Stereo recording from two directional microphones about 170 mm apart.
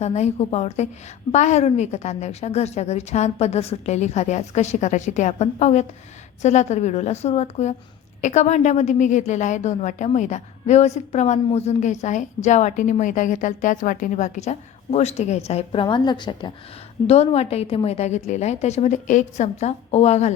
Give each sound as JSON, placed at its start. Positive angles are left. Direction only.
{"t": 0.0, "sound": "a woman's voice", "side_deg": 40}
{"t": 17.1, "sound": "a woman's voice", "side_deg": 40}